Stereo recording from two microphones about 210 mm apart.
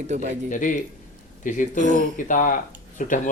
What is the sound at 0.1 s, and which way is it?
Speech, 35° right (ahead or behind).